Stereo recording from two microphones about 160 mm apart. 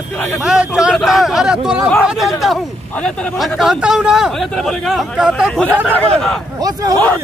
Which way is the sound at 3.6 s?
5° right (ahead or behind).